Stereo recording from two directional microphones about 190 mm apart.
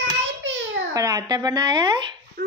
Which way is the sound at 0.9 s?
20° right (ahead or behind).